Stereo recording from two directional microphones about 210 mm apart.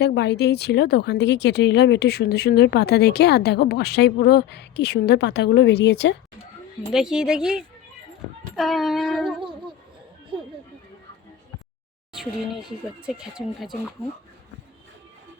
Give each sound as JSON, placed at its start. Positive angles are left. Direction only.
{"t": 0.0, "sound": "speech", "side_deg": 50}
{"t": 6.9, "sound": "speech", "side_deg": -5}
{"t": 12.1, "sound": "speech", "side_deg": 0}